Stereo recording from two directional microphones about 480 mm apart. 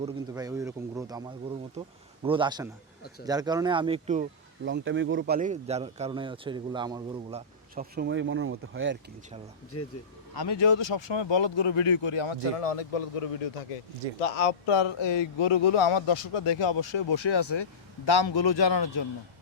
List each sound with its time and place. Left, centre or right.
0.0 s speech: centre
2.2 s speech: centre
10.3 s speech: left
14.4 s speech: left